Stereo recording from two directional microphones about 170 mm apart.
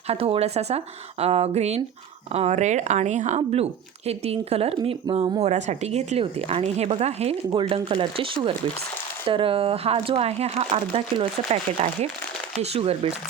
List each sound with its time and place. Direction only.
0.1 s speech: 35° right (ahead or behind)
12.7 s speech: 35° right (ahead or behind)